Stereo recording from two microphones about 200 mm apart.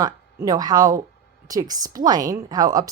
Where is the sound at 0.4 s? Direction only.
20° right (ahead or behind).